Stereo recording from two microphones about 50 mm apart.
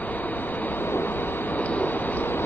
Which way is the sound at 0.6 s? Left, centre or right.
Left.